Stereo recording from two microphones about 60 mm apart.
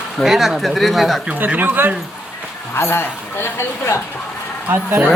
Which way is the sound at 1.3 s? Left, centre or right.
Right.